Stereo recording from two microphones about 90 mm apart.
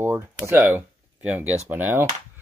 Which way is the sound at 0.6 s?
20° right (ahead or behind).